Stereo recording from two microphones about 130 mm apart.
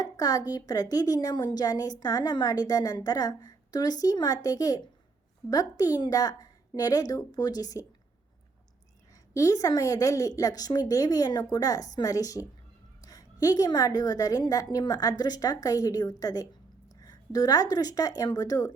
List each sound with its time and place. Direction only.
0.0 s a woman's voice: 30° left (ahead or behind)
9.3 s a woman's voice: 25° left (ahead or behind)